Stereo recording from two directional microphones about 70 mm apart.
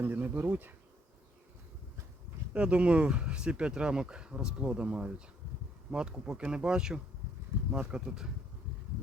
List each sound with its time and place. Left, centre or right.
0.0 s speech: right
2.5 s speech: centre